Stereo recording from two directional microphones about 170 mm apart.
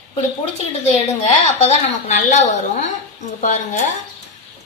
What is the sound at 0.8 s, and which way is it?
A woman's voice, 40° left (ahead or behind).